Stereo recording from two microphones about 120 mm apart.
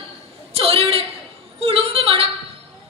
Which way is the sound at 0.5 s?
55° right (ahead or behind).